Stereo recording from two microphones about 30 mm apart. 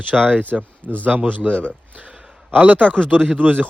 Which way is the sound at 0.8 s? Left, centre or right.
Right.